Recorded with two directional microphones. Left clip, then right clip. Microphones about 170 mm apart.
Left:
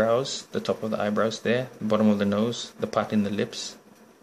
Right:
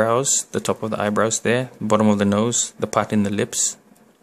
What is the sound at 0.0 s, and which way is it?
Speech, 45° right (ahead or behind).